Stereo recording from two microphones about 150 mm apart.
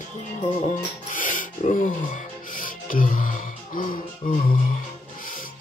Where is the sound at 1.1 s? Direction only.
60° left (ahead or behind).